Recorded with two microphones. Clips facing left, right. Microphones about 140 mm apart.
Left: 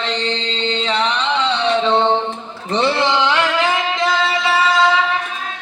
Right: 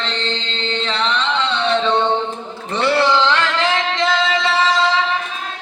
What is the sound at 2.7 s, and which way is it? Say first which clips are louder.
Music: right 1 dB; 20° left (ahead or behind).